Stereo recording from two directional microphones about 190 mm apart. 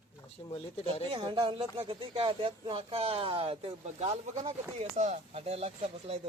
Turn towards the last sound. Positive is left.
turn(degrees=-35)  # may be behind; listen again after turning